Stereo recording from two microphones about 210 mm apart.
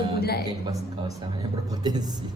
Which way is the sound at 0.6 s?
15° right (ahead or behind).